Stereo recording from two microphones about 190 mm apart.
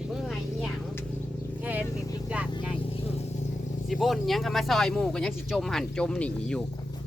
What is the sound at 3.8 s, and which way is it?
Speech, centre (ahead or behind).